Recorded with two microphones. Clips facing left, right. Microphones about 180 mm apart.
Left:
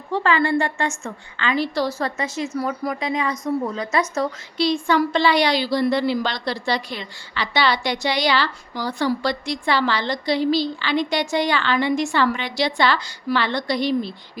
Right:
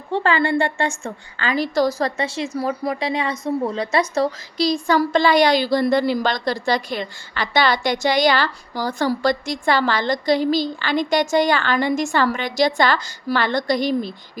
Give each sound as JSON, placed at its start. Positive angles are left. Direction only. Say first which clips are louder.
{"t": 0.1, "sound": "a woman's voice", "louder": "right 1 dB", "side_deg": -30}